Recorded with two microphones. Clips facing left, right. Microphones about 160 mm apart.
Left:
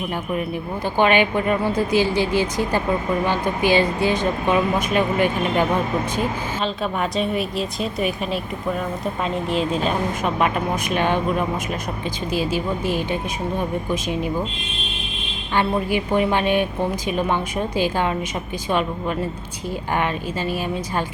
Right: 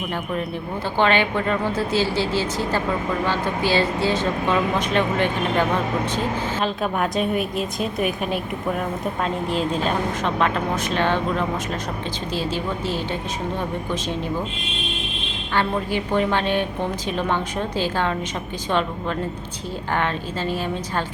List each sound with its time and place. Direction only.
0.9 s speech: 15° left (ahead or behind)
6.6 s a woman's voice: 5° right (ahead or behind)
10.2 s speech: 15° left (ahead or behind)
15.5 s speech: 10° left (ahead or behind)